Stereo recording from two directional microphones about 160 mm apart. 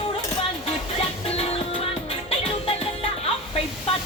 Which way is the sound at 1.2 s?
40° left (ahead or behind).